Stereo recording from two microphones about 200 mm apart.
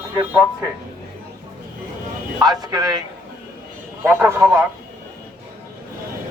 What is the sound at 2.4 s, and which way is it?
A man's voice, 20° right (ahead or behind).